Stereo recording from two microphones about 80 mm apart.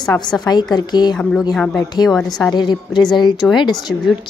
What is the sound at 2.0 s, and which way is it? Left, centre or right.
Speech, centre.